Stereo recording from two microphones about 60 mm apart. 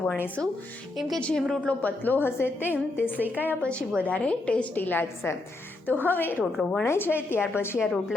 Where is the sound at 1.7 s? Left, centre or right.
Left.